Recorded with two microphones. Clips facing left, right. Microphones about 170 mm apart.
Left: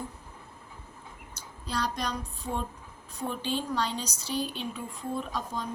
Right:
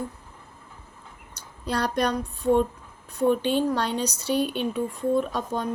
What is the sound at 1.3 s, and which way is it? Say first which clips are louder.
Speech: right 7 dB; 60° right (ahead or behind).